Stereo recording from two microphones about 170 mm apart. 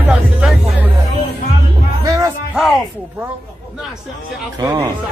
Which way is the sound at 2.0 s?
20° right (ahead or behind).